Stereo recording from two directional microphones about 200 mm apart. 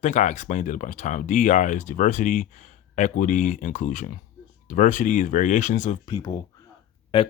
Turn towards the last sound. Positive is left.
turn(degrees=25)  # may be behind; listen again after turning